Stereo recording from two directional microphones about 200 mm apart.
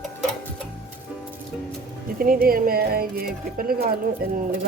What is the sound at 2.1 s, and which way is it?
Speech, 45° right (ahead or behind).